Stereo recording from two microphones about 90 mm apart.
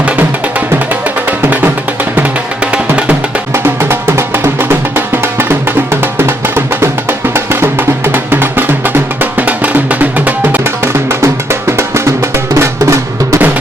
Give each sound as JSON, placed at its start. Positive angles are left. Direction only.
{"t": 2.7, "sound": "music", "side_deg": -10}
{"t": 3.5, "sound": "music", "side_deg": -25}
{"t": 12.5, "sound": "drum", "side_deg": -35}